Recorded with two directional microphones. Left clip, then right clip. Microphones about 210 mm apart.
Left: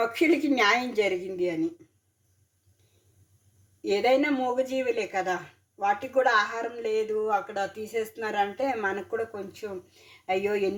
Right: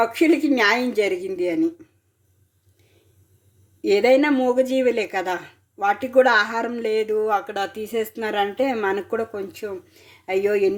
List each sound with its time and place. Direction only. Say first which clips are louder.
0.0 s a woman's voice: right 6 dB; 20° right (ahead or behind)
3.8 s a woman's voice: right 7 dB; 30° right (ahead or behind)